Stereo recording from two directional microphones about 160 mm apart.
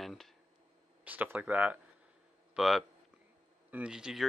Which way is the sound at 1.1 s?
10° right (ahead or behind).